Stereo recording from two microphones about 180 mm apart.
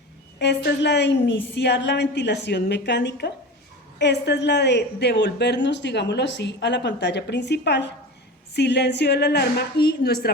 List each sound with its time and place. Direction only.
0.3 s a woman's voice: 70° left (ahead or behind)